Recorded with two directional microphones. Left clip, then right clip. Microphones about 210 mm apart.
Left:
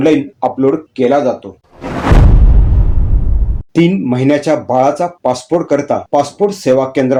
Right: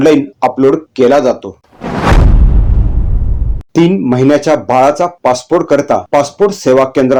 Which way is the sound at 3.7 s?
25° right (ahead or behind).